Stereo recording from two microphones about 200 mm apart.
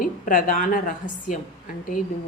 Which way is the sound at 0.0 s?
45° left (ahead or behind).